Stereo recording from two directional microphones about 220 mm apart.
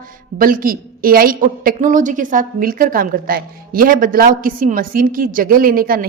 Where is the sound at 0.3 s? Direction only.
40° right (ahead or behind).